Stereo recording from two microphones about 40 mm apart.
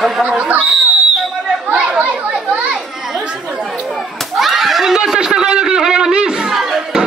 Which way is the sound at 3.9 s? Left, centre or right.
Centre.